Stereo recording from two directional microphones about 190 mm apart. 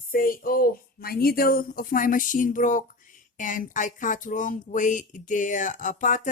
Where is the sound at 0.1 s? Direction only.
50° left (ahead or behind).